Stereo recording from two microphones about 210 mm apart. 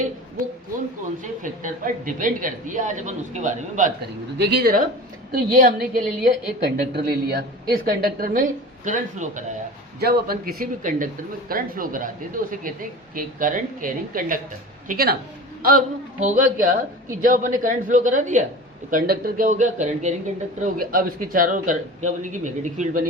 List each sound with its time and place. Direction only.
1.2 s speech: 40° right (ahead or behind)
4.4 s a woman's voice: 55° right (ahead or behind); by 9.6 s 35° right (ahead or behind)
10.0 s a woman's voice: 50° right (ahead or behind)
16.2 s speech: 40° right (ahead or behind)